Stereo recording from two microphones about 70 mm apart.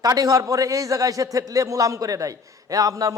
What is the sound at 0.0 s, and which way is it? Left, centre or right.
A man's voice, right.